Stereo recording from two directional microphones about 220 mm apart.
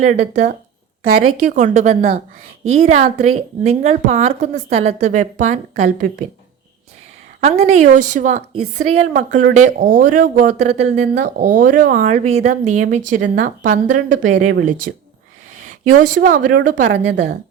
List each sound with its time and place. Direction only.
0.0 s a woman's voice: 35° right (ahead or behind)
7.4 s a woman's voice: 30° right (ahead or behind)
11.1 s a woman's voice: 40° right (ahead or behind)
17.1 s a woman's voice: 50° right (ahead or behind)